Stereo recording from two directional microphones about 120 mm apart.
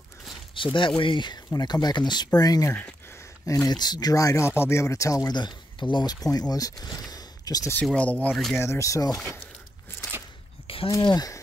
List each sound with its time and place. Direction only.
0.6 s speech: 45° left (ahead or behind)
2.7 s a sound: 15° left (ahead or behind)
3.6 s speech: 35° left (ahead or behind)
7.8 s speech: 10° left (ahead or behind)
8.5 s speech: 25° left (ahead or behind)
10.9 s speech: 30° left (ahead or behind)